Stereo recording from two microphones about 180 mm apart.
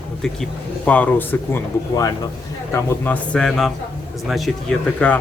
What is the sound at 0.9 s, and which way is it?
Speech, 10° left (ahead or behind).